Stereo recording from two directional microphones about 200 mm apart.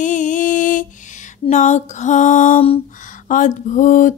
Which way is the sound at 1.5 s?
35° left (ahead or behind).